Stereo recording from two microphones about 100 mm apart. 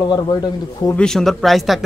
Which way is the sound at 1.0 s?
5° left (ahead or behind).